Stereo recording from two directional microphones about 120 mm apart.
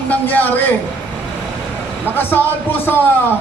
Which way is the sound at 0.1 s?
15° left (ahead or behind).